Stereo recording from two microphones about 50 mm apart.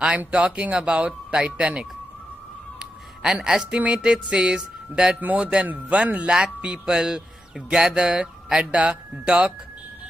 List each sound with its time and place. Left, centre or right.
0.3 s speech: right
3.2 s music: centre
5.2 s speech: right
6.2 s music: centre
8.2 s speech: centre
8.7 s speech: right